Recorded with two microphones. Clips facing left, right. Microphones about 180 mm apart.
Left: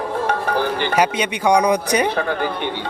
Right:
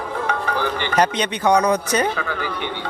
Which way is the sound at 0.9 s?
10° left (ahead or behind).